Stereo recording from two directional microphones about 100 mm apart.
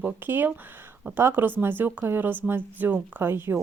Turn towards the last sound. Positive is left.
turn(degrees=-25)  # may be behind; listen again after turning